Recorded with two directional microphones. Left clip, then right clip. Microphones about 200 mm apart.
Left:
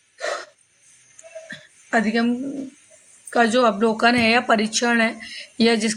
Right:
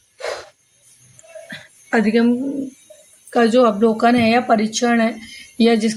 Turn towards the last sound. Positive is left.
turn(degrees=30)  # may be behind; listen again after turning